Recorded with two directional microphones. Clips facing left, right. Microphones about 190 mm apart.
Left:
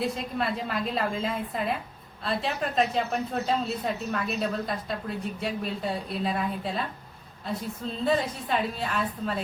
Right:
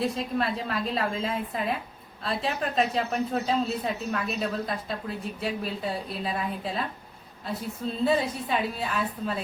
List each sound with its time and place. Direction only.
0.0 s speech: centre (ahead or behind)
8.0 s speech: 5° right (ahead or behind)